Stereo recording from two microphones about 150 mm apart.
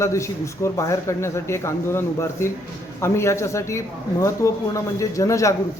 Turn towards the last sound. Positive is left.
turn(degrees=20)  # may be behind; listen again after turning